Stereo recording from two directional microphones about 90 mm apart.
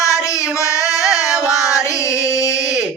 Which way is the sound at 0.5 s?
35° left (ahead or behind).